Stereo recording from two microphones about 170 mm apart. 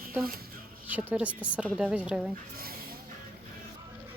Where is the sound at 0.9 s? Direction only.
10° right (ahead or behind).